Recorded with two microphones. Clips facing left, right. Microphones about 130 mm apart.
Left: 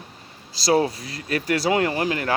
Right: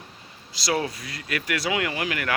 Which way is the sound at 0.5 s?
35° left (ahead or behind).